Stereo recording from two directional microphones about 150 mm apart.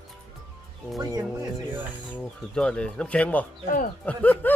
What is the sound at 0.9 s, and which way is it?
Speech, 25° right (ahead or behind).